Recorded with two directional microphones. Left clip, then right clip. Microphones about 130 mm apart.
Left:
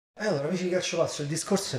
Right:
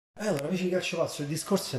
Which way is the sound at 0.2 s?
5° right (ahead or behind).